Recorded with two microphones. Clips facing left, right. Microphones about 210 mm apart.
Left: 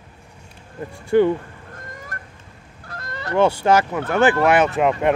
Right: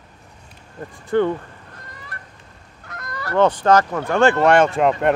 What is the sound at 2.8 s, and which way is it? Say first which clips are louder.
Goose: even; 30° left (ahead or behind).